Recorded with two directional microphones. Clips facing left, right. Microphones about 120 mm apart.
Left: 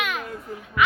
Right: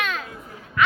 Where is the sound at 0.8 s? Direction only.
10° left (ahead or behind).